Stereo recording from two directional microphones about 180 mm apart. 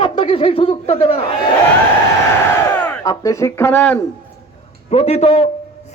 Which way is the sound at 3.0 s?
20° left (ahead or behind).